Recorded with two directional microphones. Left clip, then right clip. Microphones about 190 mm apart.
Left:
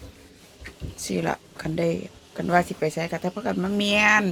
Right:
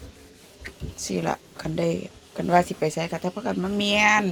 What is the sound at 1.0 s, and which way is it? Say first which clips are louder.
Speech: even; 10° left (ahead or behind).